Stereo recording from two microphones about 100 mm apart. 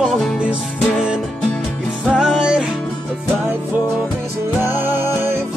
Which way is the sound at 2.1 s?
5° right (ahead or behind).